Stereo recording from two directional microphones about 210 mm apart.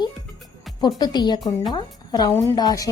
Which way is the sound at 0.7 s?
Centre (ahead or behind).